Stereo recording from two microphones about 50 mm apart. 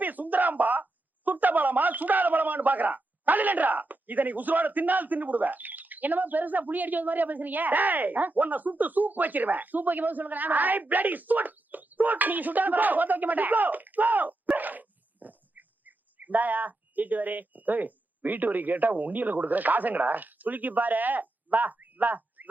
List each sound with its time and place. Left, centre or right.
0.0 s a woman's voice: right